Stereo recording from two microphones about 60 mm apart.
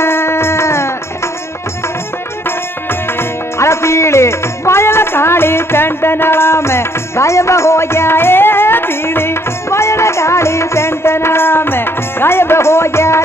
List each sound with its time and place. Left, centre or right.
0.0 s music: left
2.9 s music: left